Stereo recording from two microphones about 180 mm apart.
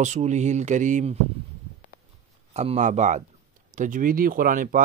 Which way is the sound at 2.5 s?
40° right (ahead or behind).